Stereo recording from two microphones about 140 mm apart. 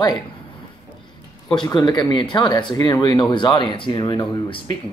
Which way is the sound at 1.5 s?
30° left (ahead or behind).